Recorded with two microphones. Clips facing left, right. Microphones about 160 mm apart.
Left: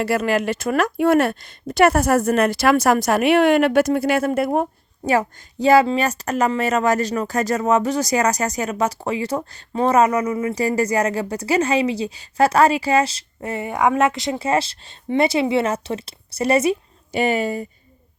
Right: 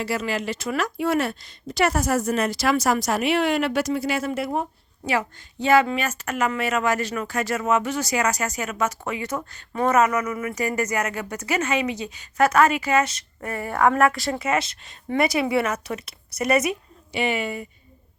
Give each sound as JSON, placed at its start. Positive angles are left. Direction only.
{"t": 0.0, "sound": "speech", "side_deg": 55}
{"t": 17.1, "sound": "speech", "side_deg": 40}